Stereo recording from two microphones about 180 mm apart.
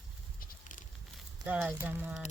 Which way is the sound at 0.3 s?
45° left (ahead or behind).